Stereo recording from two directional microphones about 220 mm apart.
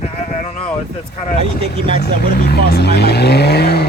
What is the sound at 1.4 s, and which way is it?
Speech, 25° right (ahead or behind).